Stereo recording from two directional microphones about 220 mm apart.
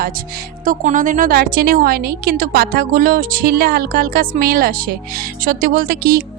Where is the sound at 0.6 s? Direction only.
35° right (ahead or behind).